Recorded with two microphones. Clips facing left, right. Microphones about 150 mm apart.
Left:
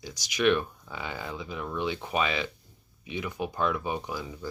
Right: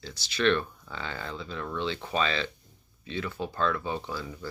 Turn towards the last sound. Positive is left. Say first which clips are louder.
# even
turn(degrees=15)  # may be behind; listen again after turning